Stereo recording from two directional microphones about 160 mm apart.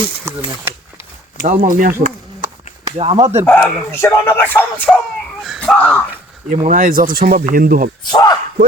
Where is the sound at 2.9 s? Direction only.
40° right (ahead or behind).